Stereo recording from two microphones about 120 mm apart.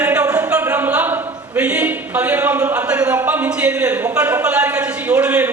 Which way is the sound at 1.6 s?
10° right (ahead or behind).